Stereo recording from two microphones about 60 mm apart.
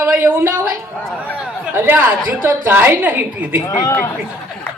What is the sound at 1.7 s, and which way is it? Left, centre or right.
A man's voice, right.